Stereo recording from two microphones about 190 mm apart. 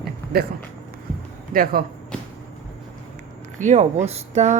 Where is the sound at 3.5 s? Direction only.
40° right (ahead or behind).